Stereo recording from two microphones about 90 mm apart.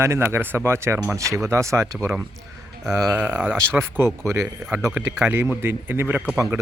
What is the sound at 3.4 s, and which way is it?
Speech, 25° right (ahead or behind).